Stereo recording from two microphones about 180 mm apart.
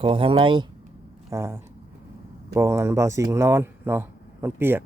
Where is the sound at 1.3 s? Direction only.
15° right (ahead or behind).